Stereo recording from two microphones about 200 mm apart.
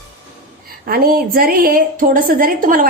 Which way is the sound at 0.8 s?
45° right (ahead or behind).